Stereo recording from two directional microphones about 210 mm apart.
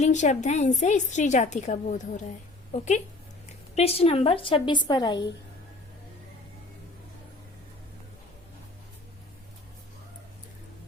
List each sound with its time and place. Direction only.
0.0 s a woman's voice: 35° left (ahead or behind)